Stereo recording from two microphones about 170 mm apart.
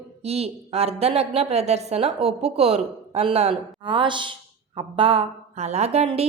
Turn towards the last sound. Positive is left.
turn(degrees=-35)  # may be behind; listen again after turning